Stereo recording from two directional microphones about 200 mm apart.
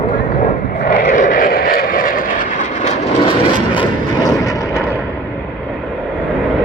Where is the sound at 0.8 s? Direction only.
40° left (ahead or behind); by 3.8 s 25° left (ahead or behind).